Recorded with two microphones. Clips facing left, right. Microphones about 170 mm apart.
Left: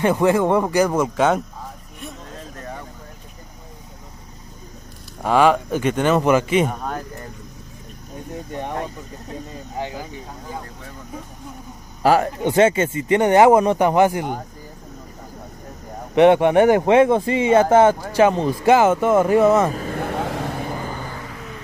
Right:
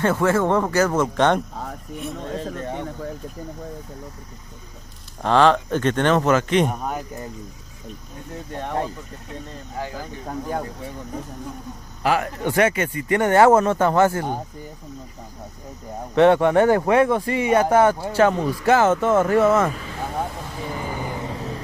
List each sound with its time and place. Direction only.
0.0 s speech: 15° left (ahead or behind)
5.2 s speech: 10° left (ahead or behind)
6.7 s speech: 10° right (ahead or behind)
9.8 s speech: 20° left (ahead or behind)
12.0 s a man's voice: 35° left (ahead or behind)
12.4 s speech: 20° left (ahead or behind)
16.2 s speech: 15° left (ahead or behind)
19.7 s vehicle: 50° left (ahead or behind)
20.1 s vehicle: 90° left
21.0 s vehicle: 20° right (ahead or behind)